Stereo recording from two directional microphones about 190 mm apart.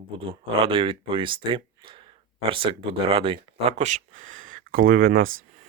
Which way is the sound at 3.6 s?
40° right (ahead or behind).